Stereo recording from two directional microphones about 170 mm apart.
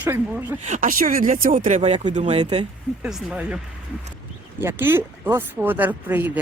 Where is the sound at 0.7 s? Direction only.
55° right (ahead or behind).